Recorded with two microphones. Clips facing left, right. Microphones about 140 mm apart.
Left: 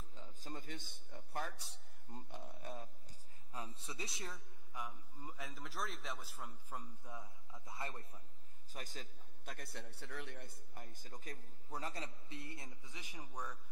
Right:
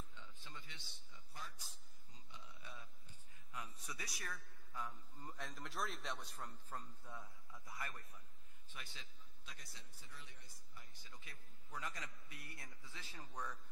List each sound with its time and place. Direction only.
0.1 s a sound: 40° left (ahead or behind)
3.5 s a man's voice: 30° left (ahead or behind)
8.7 s a man's voice: 45° left (ahead or behind); by 13.6 s 10° left (ahead or behind)